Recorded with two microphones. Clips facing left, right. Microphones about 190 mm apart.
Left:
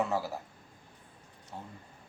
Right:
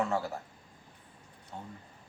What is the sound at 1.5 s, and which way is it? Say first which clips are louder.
Speech: even; 5° left (ahead or behind).